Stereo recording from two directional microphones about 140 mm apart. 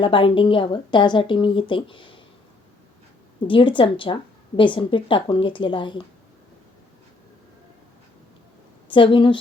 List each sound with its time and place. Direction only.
0.0 s speech: 40° left (ahead or behind)
3.4 s speech: 35° left (ahead or behind)
8.9 s speech: 40° left (ahead or behind)